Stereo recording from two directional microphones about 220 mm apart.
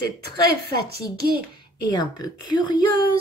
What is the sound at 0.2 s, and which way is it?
Speech, 45° right (ahead or behind).